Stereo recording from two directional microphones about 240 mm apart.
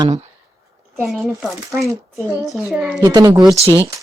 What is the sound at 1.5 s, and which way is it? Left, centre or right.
Speech, centre.